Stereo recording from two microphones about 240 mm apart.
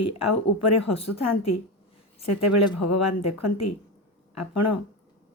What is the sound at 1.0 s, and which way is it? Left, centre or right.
Speech, left.